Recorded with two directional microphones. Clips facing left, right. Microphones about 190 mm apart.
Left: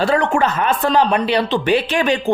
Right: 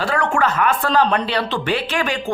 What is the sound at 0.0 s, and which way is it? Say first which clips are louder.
Speech: left 3 dB; 20° left (ahead or behind).